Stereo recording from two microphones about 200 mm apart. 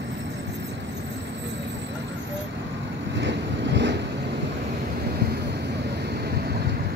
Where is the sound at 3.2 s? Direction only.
60° right (ahead or behind).